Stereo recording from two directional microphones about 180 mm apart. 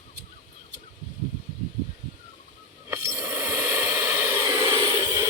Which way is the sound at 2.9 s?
15° right (ahead or behind).